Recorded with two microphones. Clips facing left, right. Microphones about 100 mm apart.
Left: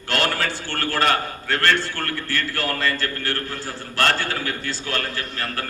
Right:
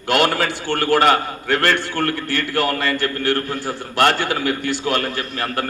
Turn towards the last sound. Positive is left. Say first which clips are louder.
# right 5 dB
turn(degrees=-20)  # may be behind; listen again after turning